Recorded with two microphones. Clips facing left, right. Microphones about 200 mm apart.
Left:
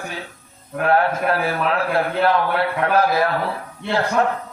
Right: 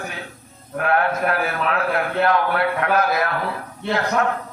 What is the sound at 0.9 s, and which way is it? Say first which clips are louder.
A man's voice: left 2 dB; 30° left (ahead or behind).